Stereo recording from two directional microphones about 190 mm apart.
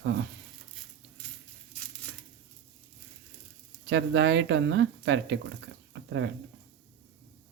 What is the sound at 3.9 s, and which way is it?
Speech, 70° right (ahead or behind).